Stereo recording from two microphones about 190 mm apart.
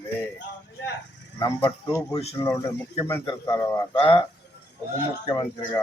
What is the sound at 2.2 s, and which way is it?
Speech, 35° left (ahead or behind).